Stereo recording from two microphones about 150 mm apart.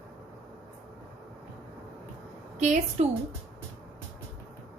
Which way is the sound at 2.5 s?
55° right (ahead or behind).